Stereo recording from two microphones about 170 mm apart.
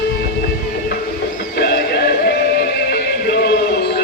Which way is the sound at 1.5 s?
70° left (ahead or behind).